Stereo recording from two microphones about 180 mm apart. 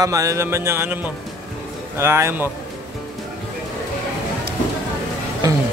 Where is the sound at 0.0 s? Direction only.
20° right (ahead or behind).